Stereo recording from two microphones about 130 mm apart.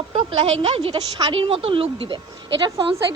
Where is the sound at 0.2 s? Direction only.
50° right (ahead or behind).